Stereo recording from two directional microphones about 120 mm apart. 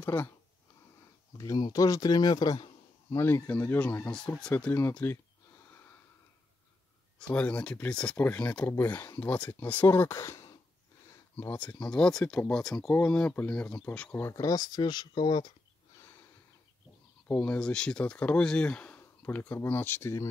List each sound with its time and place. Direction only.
0.0 s speech: 15° left (ahead or behind)
1.4 s a man's voice: 30° left (ahead or behind)
3.2 s speech: 20° left (ahead or behind)
4.9 s a sound: 20° left (ahead or behind)
7.2 s speech: 10° left (ahead or behind)
14.1 s speech: 25° left (ahead or behind)
17.3 s speech: 10° left (ahead or behind)